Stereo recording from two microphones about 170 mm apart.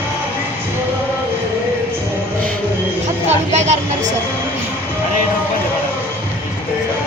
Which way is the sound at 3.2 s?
40° right (ahead or behind).